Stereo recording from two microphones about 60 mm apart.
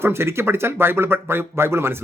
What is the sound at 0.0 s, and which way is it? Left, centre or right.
Speech, right.